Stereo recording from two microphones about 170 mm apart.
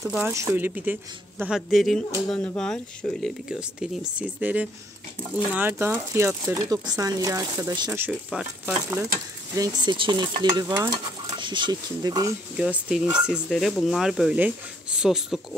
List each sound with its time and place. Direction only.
0.0 s speech: 10° right (ahead or behind)
7.9 s speech: 10° right (ahead or behind)
9.6 s speech: 25° right (ahead or behind)
12.5 s speech: 5° right (ahead or behind)